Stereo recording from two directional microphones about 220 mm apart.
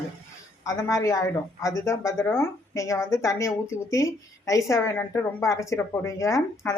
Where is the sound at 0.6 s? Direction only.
15° left (ahead or behind).